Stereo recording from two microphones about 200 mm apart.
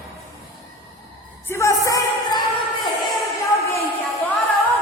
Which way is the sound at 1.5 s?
15° left (ahead or behind).